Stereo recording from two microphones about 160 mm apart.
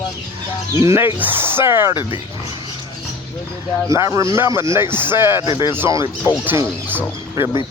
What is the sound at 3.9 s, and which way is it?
Speech, 20° right (ahead or behind).